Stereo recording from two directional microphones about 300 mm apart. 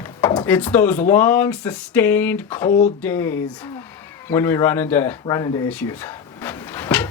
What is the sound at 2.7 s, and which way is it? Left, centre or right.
Speech, left.